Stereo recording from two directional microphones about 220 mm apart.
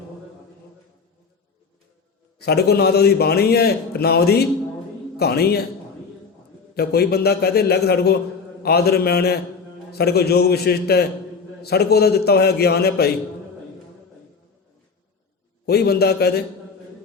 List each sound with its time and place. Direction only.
2.4 s a man's voice: 45° left (ahead or behind)
6.7 s a man's voice: 45° left (ahead or behind)
15.6 s a man's voice: 45° left (ahead or behind)